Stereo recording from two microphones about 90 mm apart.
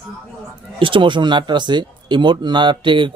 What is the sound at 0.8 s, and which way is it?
Speech, 70° right (ahead or behind).